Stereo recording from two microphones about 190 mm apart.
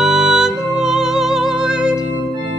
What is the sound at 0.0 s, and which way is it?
Music, centre (ahead or behind).